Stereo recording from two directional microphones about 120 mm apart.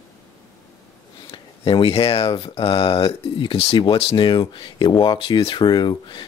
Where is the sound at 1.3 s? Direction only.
50° left (ahead or behind).